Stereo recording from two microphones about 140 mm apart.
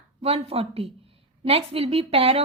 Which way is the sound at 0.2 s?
45° right (ahead or behind).